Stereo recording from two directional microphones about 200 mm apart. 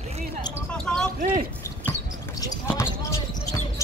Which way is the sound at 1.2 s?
40° right (ahead or behind).